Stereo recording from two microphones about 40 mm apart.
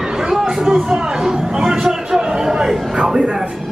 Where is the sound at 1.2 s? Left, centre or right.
Centre.